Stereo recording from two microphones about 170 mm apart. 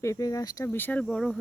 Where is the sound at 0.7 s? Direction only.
10° left (ahead or behind).